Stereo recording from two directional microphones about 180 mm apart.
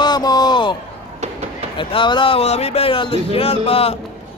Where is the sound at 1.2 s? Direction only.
40° right (ahead or behind).